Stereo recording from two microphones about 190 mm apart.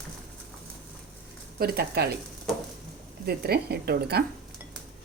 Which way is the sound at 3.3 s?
55° right (ahead or behind).